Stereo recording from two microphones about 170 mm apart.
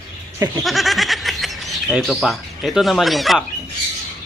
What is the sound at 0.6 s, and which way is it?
Speech, centre (ahead or behind).